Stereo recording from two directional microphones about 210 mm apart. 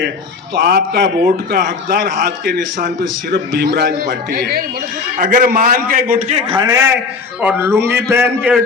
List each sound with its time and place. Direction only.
0.5 s a man's voice: 50° right (ahead or behind)
3.0 s a man's voice: 55° right (ahead or behind); by 6.6 s 30° right (ahead or behind)
6.6 s a man's voice: 15° right (ahead or behind)